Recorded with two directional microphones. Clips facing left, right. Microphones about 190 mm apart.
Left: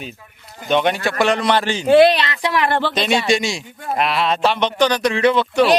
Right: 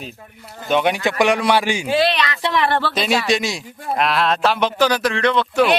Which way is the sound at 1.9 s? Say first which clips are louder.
Left 9 dB; 55° left (ahead or behind).